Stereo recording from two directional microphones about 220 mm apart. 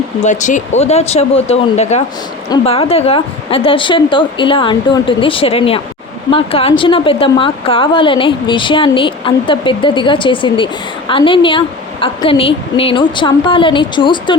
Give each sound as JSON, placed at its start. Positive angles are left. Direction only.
{"t": 0.3, "sound": "a woman's voice", "side_deg": 35}